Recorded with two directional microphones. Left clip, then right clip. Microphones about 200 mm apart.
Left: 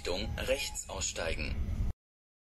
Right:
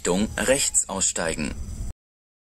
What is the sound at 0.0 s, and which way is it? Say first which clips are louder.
Speech: right 12 dB; 50° right (ahead or behind).